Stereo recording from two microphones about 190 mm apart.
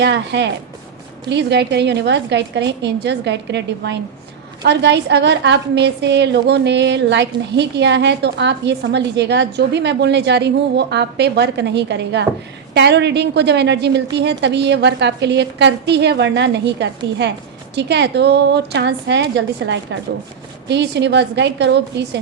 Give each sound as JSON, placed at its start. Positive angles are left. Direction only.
{"t": 0.0, "sound": "a woman's voice", "side_deg": -65}